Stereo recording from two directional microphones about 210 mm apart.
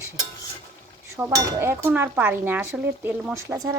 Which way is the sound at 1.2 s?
10° right (ahead or behind).